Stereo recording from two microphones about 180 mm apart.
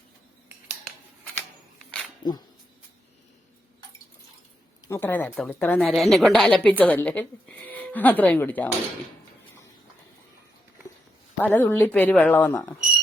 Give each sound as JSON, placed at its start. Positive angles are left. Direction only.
{"t": 2.2, "sound": "speech", "side_deg": 25}
{"t": 4.9, "sound": "a woman's voice", "side_deg": 10}
{"t": 11.3, "sound": "a woman's voice", "side_deg": 10}